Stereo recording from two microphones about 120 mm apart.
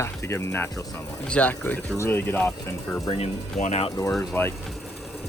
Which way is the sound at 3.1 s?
70° left (ahead or behind).